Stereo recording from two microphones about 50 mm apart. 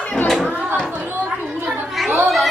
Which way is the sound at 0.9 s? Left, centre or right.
Right.